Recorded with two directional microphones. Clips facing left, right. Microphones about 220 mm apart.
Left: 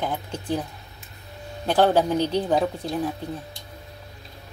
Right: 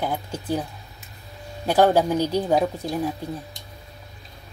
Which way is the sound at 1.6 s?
10° right (ahead or behind).